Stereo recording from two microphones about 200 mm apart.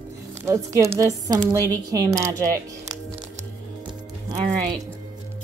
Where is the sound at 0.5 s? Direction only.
15° right (ahead or behind).